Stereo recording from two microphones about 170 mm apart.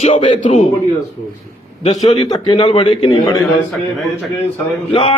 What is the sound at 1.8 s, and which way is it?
Speech, 40° left (ahead or behind).